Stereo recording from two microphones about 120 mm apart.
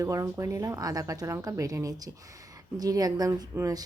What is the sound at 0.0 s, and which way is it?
A woman's voice, 25° right (ahead or behind).